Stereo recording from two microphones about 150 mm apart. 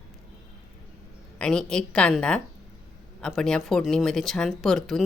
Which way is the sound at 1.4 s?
5° left (ahead or behind).